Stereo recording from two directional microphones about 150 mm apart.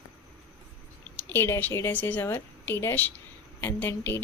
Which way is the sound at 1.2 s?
15° left (ahead or behind).